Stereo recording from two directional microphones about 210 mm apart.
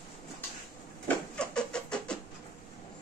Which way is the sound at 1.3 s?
5° left (ahead or behind).